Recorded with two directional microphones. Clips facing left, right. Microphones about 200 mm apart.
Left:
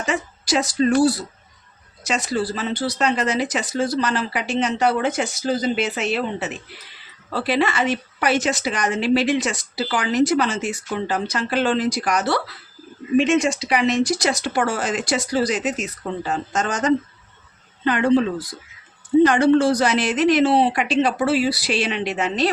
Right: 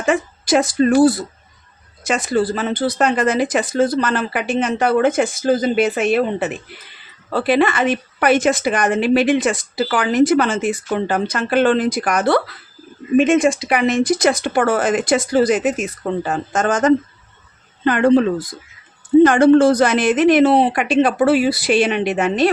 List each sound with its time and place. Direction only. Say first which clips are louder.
0.0 s a woman's voice: right 6 dB; 55° right (ahead or behind)